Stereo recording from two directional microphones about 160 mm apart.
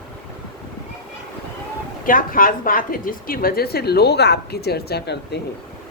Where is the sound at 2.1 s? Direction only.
60° left (ahead or behind); by 5.4 s 90° left.